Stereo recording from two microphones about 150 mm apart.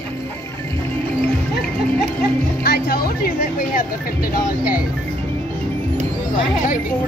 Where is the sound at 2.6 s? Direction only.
90° left.